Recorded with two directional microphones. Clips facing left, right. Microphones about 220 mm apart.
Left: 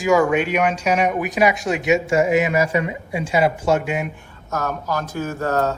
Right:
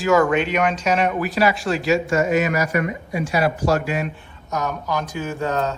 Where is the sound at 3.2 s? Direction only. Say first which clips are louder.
Left 2 dB; 25° left (ahead or behind).